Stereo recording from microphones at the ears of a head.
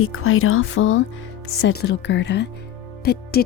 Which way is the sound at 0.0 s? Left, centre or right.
Left.